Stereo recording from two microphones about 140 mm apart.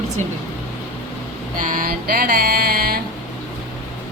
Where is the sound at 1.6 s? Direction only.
80° right.